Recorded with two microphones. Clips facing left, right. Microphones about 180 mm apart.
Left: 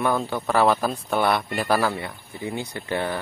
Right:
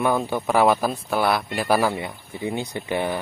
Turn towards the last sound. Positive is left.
turn(degrees=-15)  # may be behind; listen again after turning